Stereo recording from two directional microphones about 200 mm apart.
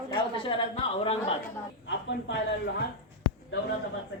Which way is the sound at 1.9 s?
65° left (ahead or behind).